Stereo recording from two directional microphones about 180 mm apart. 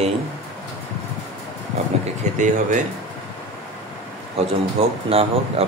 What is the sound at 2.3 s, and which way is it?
Speech, 45° right (ahead or behind).